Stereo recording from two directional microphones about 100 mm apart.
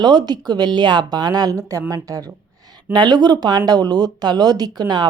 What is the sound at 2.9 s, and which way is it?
A woman's voice, 45° right (ahead or behind).